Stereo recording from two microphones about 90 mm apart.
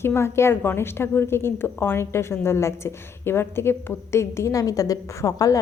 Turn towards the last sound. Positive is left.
turn(degrees=40)  # may be behind; listen again after turning